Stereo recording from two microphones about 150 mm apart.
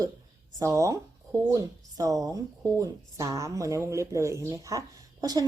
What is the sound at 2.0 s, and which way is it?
A woman's voice, 25° right (ahead or behind).